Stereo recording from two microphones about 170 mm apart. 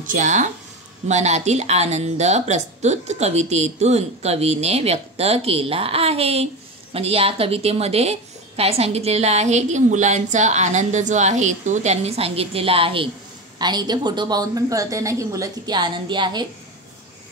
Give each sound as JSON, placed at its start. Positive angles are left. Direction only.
{"t": 0.0, "sound": "a woman's voice", "side_deg": -50}